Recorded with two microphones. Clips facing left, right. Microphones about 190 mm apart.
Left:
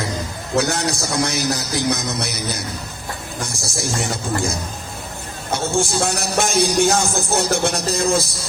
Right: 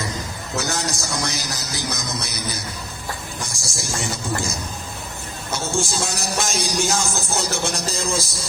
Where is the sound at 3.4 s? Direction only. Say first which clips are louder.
Left 6 dB; 60° left (ahead or behind).